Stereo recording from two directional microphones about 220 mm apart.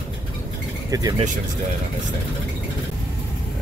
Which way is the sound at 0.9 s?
15° right (ahead or behind).